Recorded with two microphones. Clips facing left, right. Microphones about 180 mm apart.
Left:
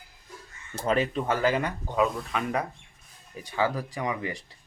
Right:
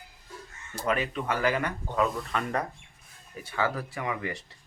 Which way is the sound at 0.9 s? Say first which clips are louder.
Left 3 dB; 30° left (ahead or behind).